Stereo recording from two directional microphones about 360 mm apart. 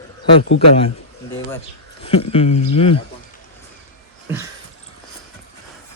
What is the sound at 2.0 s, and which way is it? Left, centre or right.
Speech, centre.